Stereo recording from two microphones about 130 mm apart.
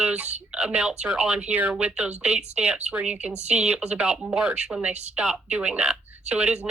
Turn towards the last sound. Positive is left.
turn(degrees=-10)  # may be behind; listen again after turning